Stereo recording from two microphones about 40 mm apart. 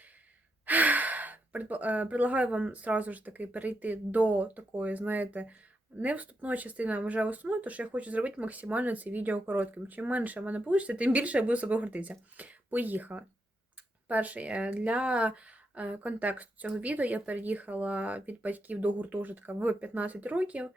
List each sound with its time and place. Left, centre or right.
0.6 s speech: right